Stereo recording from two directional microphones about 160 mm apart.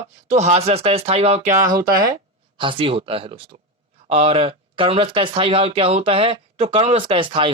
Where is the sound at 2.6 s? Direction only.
30° right (ahead or behind).